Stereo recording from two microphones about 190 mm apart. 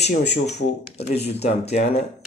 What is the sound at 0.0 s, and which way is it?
Speech, 35° left (ahead or behind).